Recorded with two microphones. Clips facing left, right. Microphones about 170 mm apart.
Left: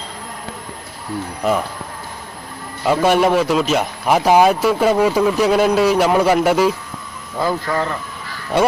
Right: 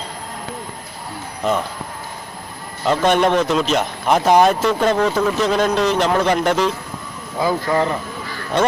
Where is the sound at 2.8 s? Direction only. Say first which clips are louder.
Left 1 dB; 10° left (ahead or behind).